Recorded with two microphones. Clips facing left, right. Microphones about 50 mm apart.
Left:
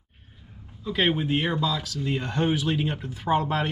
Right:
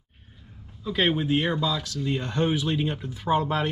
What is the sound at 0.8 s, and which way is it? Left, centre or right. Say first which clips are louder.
Speech: even; centre.